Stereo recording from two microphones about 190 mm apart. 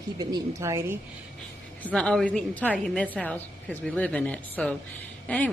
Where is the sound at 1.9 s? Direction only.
5° left (ahead or behind).